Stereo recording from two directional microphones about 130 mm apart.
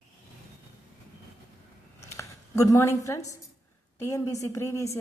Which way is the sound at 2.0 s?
25° left (ahead or behind).